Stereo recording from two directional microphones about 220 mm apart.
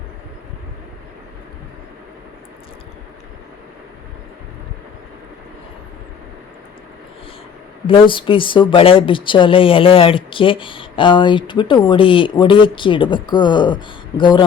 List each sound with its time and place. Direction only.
7.9 s speech: 20° left (ahead or behind)